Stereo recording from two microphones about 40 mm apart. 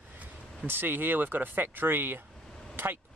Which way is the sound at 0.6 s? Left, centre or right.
Right.